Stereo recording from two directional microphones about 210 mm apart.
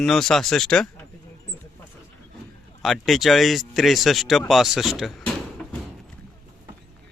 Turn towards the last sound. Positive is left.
turn(degrees=5)  # may be behind; listen again after turning